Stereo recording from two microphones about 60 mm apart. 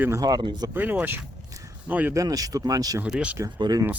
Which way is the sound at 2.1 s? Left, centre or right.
Right.